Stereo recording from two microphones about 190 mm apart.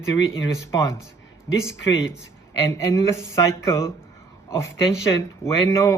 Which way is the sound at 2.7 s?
15° left (ahead or behind).